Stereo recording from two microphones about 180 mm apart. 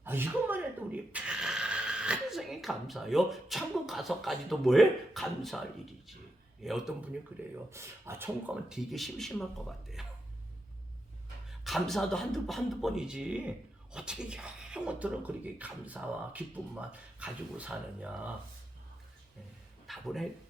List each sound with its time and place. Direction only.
0.0 s speech: 10° right (ahead or behind)
6.6 s speech: centre (ahead or behind)
7.7 s speech: 15° right (ahead or behind)
11.6 s speech: centre (ahead or behind)
19.9 s speech: centre (ahead or behind)